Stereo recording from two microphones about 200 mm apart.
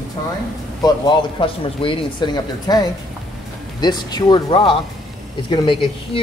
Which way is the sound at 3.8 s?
20° left (ahead or behind).